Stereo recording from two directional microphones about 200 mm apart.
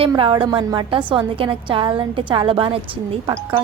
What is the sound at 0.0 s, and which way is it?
A woman's voice, 25° right (ahead or behind).